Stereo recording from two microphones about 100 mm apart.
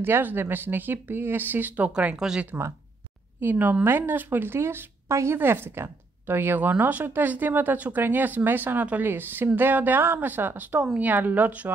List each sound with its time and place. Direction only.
0.0 s speech: 20° right (ahead or behind)
3.3 s speech: 20° right (ahead or behind)